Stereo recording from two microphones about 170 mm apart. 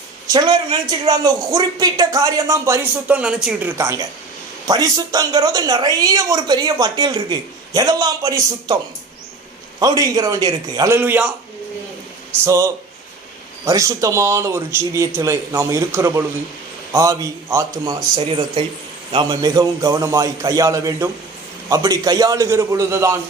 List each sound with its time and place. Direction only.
0.3 s a woman's voice: 25° right (ahead or behind)
9.8 s a woman's voice: 20° right (ahead or behind)
12.5 s a woman's voice: 20° right (ahead or behind)